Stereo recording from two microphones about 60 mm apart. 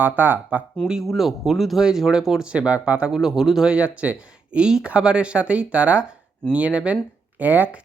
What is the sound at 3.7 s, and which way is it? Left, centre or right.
Speech, right.